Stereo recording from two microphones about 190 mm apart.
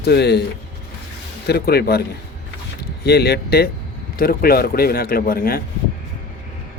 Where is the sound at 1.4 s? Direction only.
55° left (ahead or behind).